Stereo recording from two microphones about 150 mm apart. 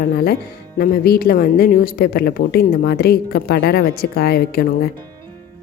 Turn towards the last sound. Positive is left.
turn(degrees=85)